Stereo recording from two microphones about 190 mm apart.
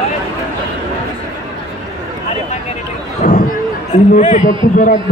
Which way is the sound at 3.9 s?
40° left (ahead or behind).